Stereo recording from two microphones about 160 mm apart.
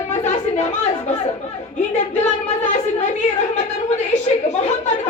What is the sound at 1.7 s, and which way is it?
Speech, 45° left (ahead or behind).